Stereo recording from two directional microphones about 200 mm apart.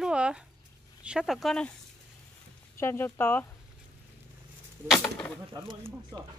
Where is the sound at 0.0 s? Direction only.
5° right (ahead or behind).